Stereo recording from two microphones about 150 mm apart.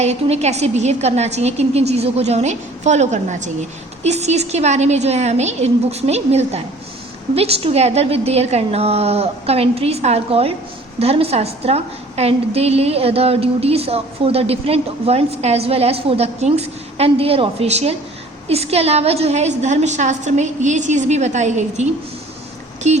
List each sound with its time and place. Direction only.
0.0 s a woman's voice: 45° right (ahead or behind)
22.8 s a woman's voice: 50° right (ahead or behind)